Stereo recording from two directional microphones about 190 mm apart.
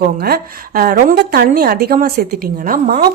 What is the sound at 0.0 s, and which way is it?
A woman's voice, 55° right (ahead or behind).